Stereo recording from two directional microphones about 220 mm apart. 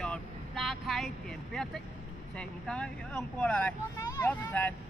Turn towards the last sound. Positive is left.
turn(degrees=5)  # may be behind; listen again after turning